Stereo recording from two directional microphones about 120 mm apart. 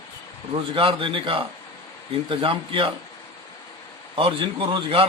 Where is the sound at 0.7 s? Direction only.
45° right (ahead or behind).